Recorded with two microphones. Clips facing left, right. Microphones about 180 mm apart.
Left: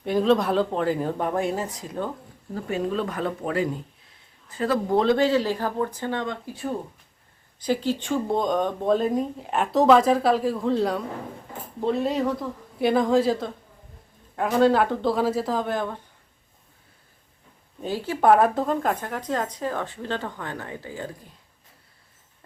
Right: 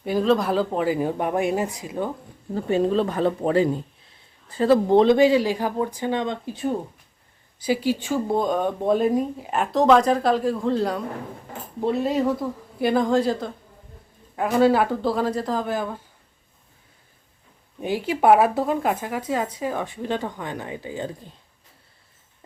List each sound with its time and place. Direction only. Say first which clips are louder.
0.0 s speech: even; centre (ahead or behind)
2.6 s speech: right 6 dB; 30° right (ahead or behind)
7.6 s speech: right 2 dB; 10° right (ahead or behind)
17.7 s speech: right 3 dB; 15° right (ahead or behind)